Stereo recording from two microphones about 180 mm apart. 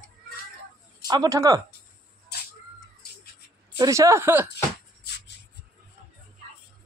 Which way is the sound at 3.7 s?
20° right (ahead or behind).